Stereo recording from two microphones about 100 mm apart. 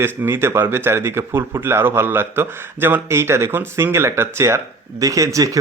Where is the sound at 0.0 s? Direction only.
25° right (ahead or behind).